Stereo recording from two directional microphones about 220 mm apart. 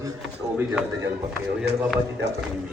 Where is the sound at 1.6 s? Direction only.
5° right (ahead or behind).